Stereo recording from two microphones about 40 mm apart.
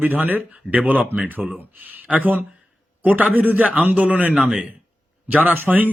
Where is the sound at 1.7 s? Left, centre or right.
Right.